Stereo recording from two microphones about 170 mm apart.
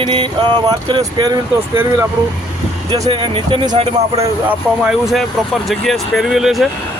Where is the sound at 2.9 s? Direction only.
25° right (ahead or behind).